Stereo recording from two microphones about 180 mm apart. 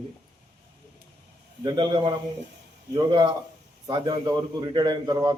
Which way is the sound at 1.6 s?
25° right (ahead or behind).